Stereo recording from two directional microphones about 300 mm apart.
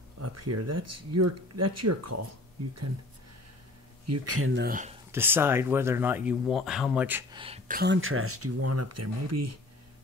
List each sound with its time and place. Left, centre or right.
0.2 s speech: right
4.0 s speech: right
4.6 s speech: right
5.1 s speech: centre
7.4 s speech: right